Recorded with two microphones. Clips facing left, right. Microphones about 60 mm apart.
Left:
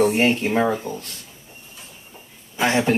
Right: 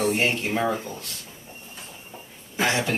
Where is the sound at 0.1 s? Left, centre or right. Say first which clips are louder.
Left 5 dB; left.